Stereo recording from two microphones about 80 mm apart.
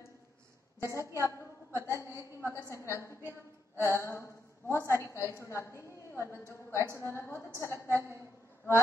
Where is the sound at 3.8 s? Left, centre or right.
Left.